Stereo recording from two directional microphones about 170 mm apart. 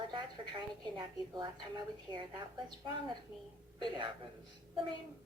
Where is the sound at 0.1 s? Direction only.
25° right (ahead or behind).